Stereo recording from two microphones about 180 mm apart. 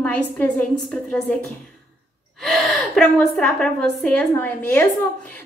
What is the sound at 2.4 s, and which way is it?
A woman's voice, centre (ahead or behind).